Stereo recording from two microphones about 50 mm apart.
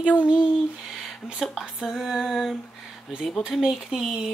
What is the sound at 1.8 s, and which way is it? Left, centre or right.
A woman's voice, centre.